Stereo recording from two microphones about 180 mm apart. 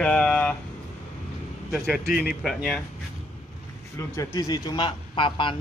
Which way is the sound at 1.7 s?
5° right (ahead or behind).